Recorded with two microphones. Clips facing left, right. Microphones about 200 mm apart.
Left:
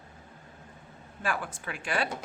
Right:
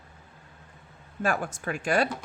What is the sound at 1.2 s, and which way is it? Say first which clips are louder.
Speech: right 5 dB; 45° right (ahead or behind).